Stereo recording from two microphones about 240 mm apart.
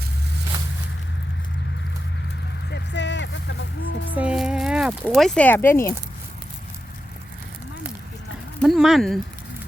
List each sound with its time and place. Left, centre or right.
2.6 s vehicle: left
4.2 s a sound: centre
8.5 s speech: centre